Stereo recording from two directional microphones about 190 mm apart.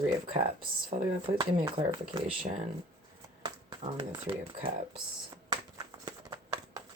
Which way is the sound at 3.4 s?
25° right (ahead or behind).